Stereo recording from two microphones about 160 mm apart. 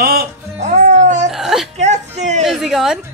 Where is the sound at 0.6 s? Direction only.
45° right (ahead or behind).